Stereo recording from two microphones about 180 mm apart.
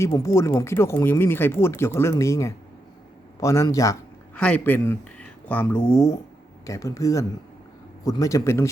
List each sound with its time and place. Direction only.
0.0 s speech: 15° left (ahead or behind)
4.4 s speech: 5° left (ahead or behind)